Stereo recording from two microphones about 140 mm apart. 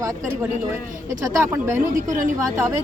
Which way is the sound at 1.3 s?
20° right (ahead or behind).